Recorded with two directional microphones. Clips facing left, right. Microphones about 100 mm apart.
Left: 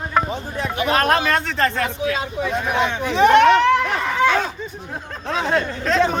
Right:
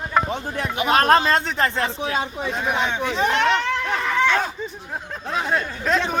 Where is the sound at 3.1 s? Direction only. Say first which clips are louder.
Left 9 dB; 60° left (ahead or behind).